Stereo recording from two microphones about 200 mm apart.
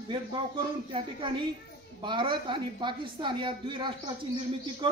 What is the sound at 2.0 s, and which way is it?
A woman's voice, 25° right (ahead or behind).